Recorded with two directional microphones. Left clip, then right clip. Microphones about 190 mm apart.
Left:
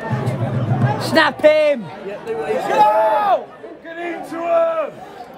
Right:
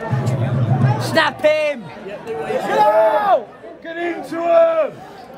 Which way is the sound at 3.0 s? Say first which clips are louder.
Right 1 dB; 35° right (ahead or behind).